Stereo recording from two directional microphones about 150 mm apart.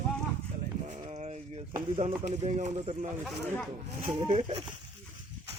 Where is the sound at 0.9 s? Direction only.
50° right (ahead or behind).